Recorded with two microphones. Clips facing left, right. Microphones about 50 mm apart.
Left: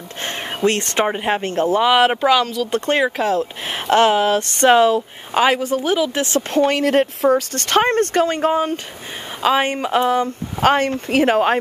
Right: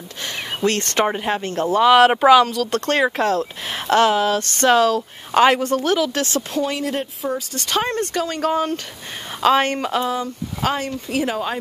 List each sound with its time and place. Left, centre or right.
0.6 s speech: left
1.8 s a woman's voice: centre
2.6 s a woman's voice: centre
5.3 s a woman's voice: centre
6.2 s speech: left
8.5 s a woman's voice: centre
9.8 s speech: left